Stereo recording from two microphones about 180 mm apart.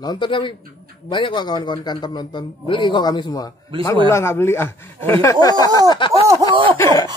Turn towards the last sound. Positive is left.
turn(degrees=15)  # may be behind; listen again after turning